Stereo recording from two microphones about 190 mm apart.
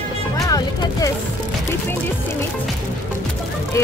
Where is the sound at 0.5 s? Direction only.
20° left (ahead or behind).